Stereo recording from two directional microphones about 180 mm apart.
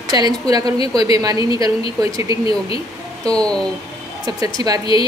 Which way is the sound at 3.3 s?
5° left (ahead or behind).